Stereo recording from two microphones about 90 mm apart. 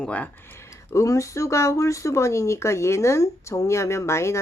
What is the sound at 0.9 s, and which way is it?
Speech, 35° left (ahead or behind).